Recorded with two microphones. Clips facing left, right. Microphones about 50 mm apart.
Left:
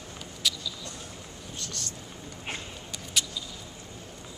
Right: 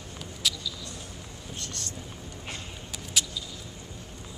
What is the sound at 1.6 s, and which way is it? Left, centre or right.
Speech, right.